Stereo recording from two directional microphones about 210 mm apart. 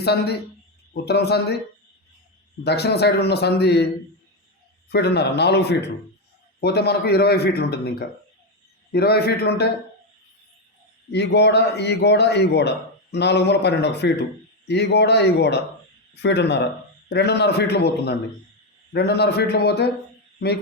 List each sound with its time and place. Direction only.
0.0 s a man's voice: 50° left (ahead or behind)
2.6 s a man's voice: 50° left (ahead or behind)
4.9 s a man's voice: 50° left (ahead or behind)
11.1 s a man's voice: 55° left (ahead or behind)